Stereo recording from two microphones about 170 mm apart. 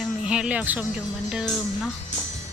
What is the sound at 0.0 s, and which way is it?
Speech, 5° right (ahead or behind).